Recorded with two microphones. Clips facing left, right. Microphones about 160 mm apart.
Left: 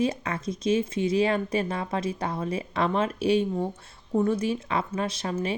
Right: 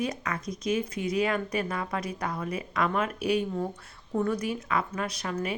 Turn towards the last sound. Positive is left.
turn(degrees=25)  # may be behind; listen again after turning